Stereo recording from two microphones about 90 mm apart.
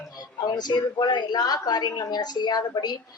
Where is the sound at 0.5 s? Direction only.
50° left (ahead or behind).